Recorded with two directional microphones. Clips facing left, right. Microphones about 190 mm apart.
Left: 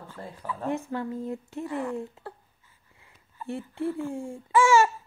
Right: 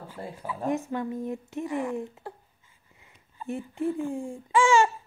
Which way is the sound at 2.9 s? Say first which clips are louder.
Right 1 dB; 20° right (ahead or behind).